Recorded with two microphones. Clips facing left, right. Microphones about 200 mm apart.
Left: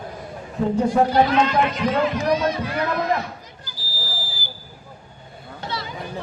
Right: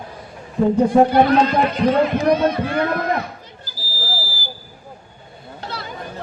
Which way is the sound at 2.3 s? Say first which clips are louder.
Right 4 dB; 55° right (ahead or behind).